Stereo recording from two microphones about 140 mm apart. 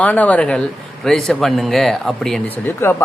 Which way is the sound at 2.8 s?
20° left (ahead or behind).